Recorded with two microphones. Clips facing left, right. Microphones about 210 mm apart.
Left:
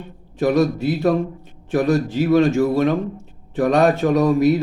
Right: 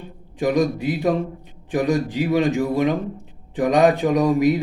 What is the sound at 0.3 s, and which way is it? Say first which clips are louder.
A man's voice: left 2 dB; 15° right (ahead or behind).